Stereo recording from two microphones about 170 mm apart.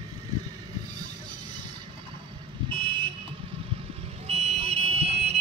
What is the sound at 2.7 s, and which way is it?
Car alarm, 30° right (ahead or behind).